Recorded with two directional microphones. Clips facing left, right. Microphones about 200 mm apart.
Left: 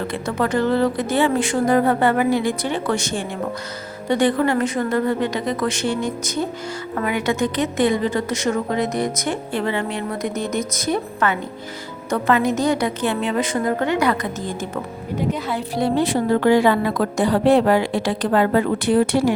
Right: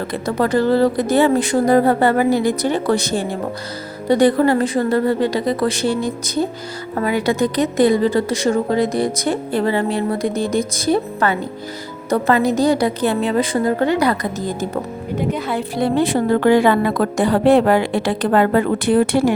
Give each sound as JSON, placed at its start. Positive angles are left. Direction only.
{"t": 0.1, "sound": "a woman's voice", "side_deg": -35}
{"t": 15.3, "sound": "a woman's voice", "side_deg": -55}